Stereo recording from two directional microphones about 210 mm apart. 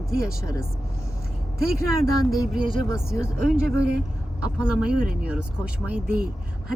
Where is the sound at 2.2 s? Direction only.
Centre (ahead or behind).